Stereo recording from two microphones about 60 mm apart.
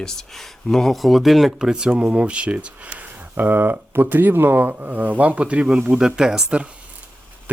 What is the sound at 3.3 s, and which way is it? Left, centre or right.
Speech, right.